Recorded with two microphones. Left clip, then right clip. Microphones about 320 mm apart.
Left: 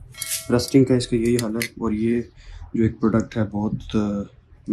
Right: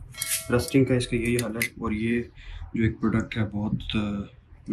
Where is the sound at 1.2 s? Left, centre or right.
Centre.